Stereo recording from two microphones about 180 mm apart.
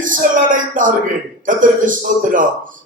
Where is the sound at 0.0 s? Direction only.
45° right (ahead or behind).